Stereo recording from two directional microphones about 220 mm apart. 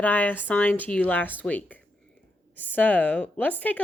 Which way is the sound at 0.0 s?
10° left (ahead or behind).